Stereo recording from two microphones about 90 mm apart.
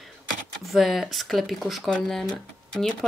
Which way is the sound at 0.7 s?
5° right (ahead or behind).